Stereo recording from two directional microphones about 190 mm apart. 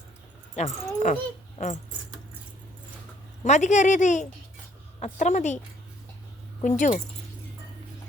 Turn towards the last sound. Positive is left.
turn(degrees=40)  # may be behind; listen again after turning